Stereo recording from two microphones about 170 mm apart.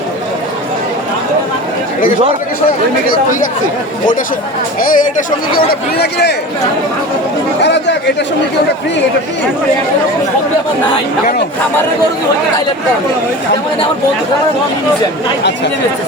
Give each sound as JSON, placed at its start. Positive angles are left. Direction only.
{"t": 4.8, "sound": "speech", "side_deg": 55}
{"t": 6.0, "sound": "a man's voice", "side_deg": 75}
{"t": 7.6, "sound": "speech", "side_deg": 90}